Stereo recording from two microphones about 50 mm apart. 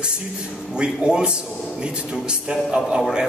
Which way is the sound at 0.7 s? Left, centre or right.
Centre.